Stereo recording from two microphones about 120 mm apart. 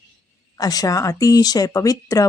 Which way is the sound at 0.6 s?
30° left (ahead or behind).